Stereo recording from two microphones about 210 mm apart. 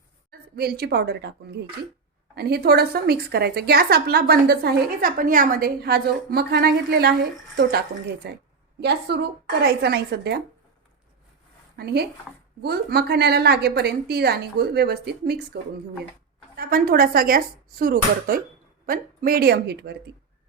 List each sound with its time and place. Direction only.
0.3 s a woman's voice: 50° right (ahead or behind)
11.8 s a woman's voice: 50° right (ahead or behind)
16.6 s a woman's voice: 45° right (ahead or behind)